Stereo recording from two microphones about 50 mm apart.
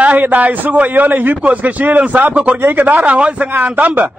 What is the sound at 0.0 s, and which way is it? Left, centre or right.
A man's voice, right.